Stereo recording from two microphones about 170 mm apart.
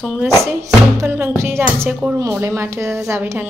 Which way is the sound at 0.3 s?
15° right (ahead or behind).